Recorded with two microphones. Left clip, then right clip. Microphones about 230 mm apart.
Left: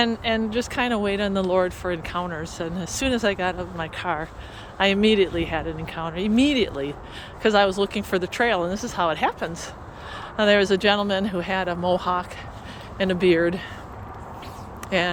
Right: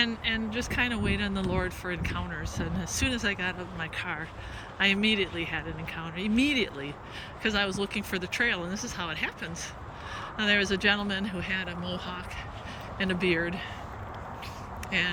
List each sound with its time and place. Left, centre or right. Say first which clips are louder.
0.0 s speech: left 6 dB; centre
14.8 s speech: left 6 dB; centre